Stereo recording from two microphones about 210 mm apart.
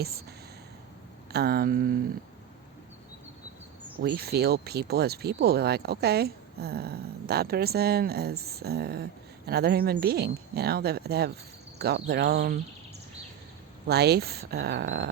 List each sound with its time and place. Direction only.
1.3 s speech: 50° right (ahead or behind)
4.0 s speech: 50° right (ahead or behind)
13.8 s speech: 50° right (ahead or behind)